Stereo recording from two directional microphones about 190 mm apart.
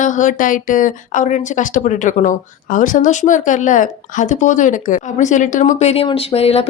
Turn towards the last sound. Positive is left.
turn(degrees=30)  # may be behind; listen again after turning